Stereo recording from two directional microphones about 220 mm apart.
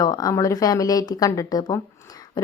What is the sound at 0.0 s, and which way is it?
A woman's voice, 15° left (ahead or behind).